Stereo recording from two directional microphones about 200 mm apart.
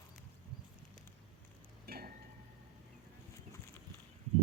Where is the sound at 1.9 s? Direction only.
50° right (ahead or behind).